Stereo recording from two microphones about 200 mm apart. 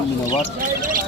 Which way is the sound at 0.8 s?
45° right (ahead or behind).